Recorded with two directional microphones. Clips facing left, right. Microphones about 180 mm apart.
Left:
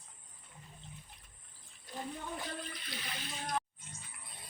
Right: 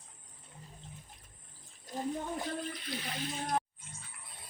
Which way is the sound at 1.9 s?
45° right (ahead or behind).